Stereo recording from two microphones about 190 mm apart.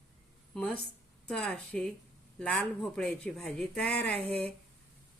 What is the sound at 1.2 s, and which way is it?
Speech, 5° left (ahead or behind).